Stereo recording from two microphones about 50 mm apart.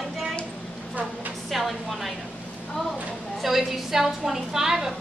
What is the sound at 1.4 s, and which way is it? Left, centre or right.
Speech, centre.